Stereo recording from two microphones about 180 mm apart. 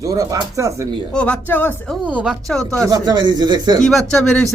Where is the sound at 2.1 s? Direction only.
10° right (ahead or behind).